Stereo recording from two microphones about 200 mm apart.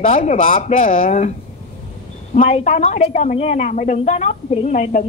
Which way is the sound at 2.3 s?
35° left (ahead or behind).